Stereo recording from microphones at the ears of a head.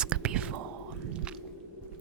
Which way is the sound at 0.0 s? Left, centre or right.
Right.